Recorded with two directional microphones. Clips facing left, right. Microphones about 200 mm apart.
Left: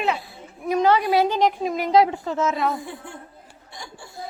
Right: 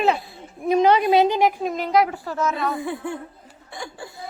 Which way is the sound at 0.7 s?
20° right (ahead or behind).